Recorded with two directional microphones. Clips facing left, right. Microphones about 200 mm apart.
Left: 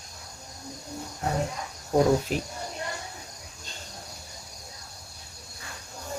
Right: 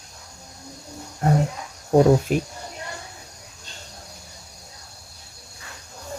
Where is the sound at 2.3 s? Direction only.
50° right (ahead or behind).